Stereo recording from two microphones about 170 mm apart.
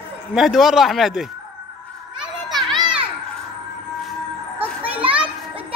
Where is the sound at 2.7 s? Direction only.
25° right (ahead or behind).